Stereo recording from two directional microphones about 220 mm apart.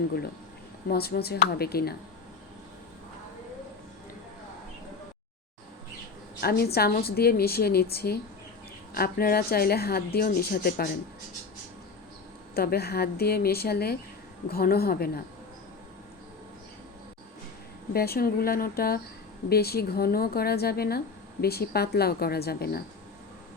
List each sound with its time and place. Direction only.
0.9 s speech: 45° left (ahead or behind)
6.4 s speech: 45° left (ahead or behind)
12.5 s speech: 45° left (ahead or behind)
17.9 s speech: 45° left (ahead or behind)